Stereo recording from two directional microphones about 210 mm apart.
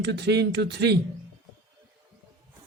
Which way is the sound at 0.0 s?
55° right (ahead or behind).